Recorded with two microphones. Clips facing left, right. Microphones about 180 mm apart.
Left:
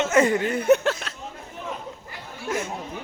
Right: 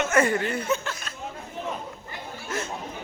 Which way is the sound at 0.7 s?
70° left (ahead or behind).